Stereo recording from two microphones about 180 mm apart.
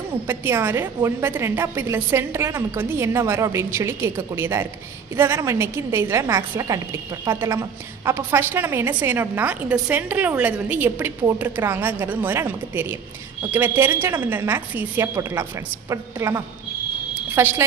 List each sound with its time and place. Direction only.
0.3 s a woman's voice: 10° right (ahead or behind)